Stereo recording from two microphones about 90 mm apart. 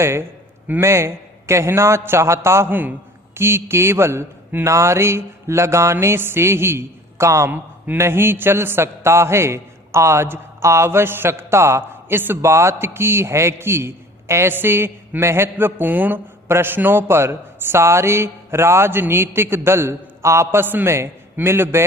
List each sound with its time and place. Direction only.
0.0 s a man's voice: 30° right (ahead or behind)